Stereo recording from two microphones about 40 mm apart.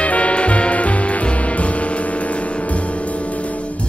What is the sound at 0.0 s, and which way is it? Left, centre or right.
Music, left.